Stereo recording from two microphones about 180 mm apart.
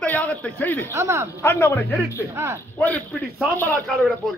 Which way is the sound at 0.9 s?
15° right (ahead or behind).